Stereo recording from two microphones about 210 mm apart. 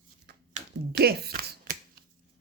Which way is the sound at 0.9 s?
50° right (ahead or behind).